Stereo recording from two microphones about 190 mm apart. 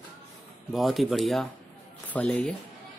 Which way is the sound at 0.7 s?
Centre (ahead or behind).